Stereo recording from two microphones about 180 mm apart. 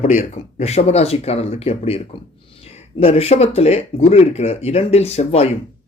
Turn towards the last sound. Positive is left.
turn(degrees=35)  # may be behind; listen again after turning